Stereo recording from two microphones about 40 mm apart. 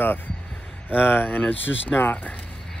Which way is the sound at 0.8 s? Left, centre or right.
Left.